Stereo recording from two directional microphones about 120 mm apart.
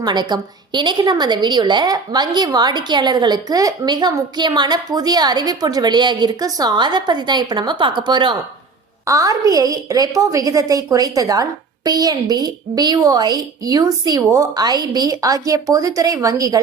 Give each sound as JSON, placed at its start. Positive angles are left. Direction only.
{"t": 0.0, "sound": "a woman's voice", "side_deg": -35}
{"t": 9.0, "sound": "a woman's voice", "side_deg": -25}